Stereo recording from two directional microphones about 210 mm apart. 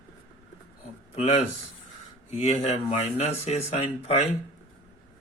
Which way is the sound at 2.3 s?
30° left (ahead or behind).